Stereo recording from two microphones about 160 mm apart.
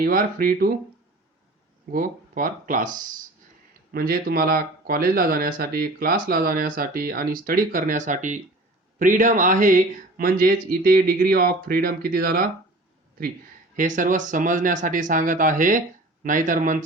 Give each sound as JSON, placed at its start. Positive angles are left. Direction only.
{"t": 0.0, "sound": "speech", "side_deg": -65}
{"t": 1.9, "sound": "speech", "side_deg": -60}
{"t": 3.9, "sound": "speech", "side_deg": -70}
{"t": 13.7, "sound": "speech", "side_deg": -55}